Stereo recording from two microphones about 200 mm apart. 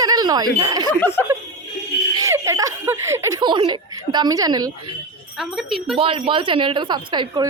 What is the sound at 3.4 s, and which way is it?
A woman's voice, 20° right (ahead or behind).